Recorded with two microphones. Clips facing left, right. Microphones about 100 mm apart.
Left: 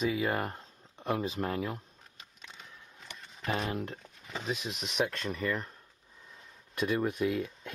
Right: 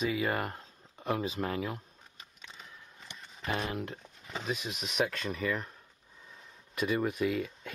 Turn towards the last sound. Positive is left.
turn(degrees=0)  # may be behind; listen again after turning